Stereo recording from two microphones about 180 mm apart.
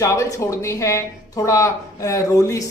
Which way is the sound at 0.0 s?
15° left (ahead or behind).